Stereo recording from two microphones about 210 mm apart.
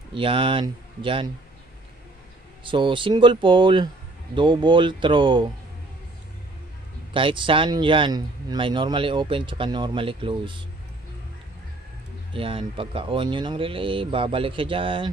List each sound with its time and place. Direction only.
0.1 s speech: 25° right (ahead or behind)
2.6 s speech: 25° right (ahead or behind)
7.2 s speech: 25° right (ahead or behind)
12.4 s speech: 25° right (ahead or behind)